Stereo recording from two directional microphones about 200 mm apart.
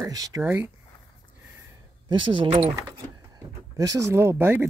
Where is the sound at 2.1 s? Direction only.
25° right (ahead or behind).